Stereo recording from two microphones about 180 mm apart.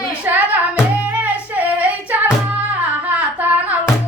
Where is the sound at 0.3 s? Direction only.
10° right (ahead or behind).